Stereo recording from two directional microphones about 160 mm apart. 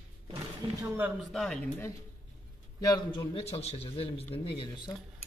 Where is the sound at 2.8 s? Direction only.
25° left (ahead or behind).